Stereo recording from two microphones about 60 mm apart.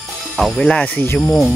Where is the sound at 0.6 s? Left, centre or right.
Left.